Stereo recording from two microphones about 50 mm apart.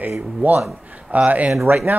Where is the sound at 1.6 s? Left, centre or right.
Right.